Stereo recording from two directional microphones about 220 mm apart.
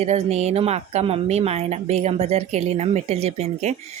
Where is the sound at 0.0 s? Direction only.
30° right (ahead or behind).